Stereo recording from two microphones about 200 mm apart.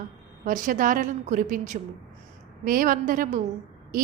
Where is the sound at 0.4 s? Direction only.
40° right (ahead or behind).